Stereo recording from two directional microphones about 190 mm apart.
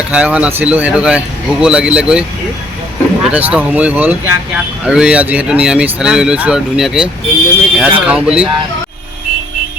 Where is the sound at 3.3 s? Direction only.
10° right (ahead or behind).